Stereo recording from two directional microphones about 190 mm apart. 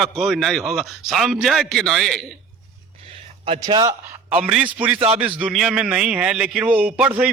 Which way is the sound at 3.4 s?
25° right (ahead or behind).